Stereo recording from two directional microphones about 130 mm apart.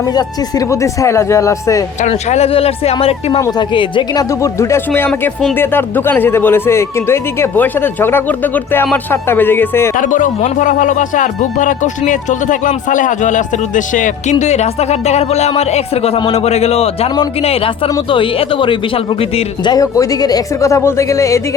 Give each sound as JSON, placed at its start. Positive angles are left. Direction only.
{"t": 0.1, "sound": "speech", "side_deg": 30}
{"t": 2.0, "sound": "speech", "side_deg": 60}
{"t": 3.6, "sound": "speech", "side_deg": 40}
{"t": 10.0, "sound": "speech", "side_deg": 85}
{"t": 18.1, "sound": "speech", "side_deg": 40}